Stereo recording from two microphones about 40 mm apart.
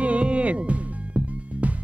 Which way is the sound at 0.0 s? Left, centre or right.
Right.